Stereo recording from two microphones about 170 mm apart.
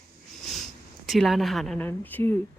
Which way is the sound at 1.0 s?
Centre (ahead or behind).